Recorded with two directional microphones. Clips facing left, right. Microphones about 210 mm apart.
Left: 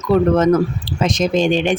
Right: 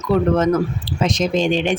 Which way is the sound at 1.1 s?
45° left (ahead or behind).